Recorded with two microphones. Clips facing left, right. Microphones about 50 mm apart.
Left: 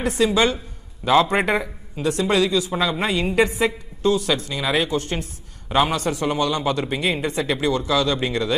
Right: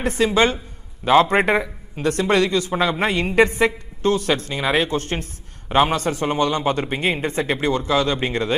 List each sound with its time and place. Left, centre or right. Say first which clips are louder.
0.0 s a man's voice: right 1 dB; right